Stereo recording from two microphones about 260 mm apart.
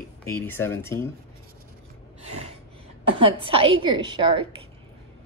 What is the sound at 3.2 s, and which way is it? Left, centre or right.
A woman's voice, right.